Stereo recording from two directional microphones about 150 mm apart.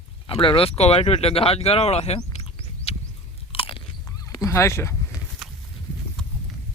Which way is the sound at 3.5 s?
40° left (ahead or behind).